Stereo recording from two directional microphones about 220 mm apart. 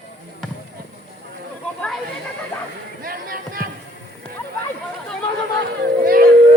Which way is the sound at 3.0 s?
40° right (ahead or behind).